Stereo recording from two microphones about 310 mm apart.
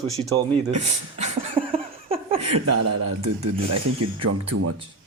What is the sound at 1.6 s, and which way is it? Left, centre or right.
Laughter, centre.